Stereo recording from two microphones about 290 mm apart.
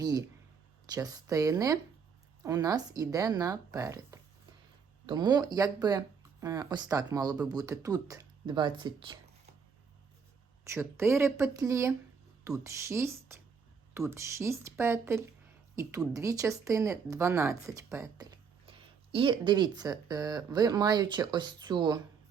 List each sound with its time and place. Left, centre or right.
0.0 s speech: centre
10.6 s speech: centre
17.8 s a sound: centre
19.1 s speech: centre